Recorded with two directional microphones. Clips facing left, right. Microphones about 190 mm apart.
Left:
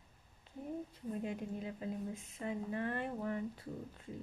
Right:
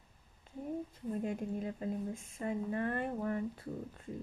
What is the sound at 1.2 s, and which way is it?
Speech, 45° right (ahead or behind).